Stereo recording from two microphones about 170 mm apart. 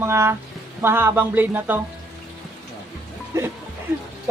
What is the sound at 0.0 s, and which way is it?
A woman's voice, 15° right (ahead or behind).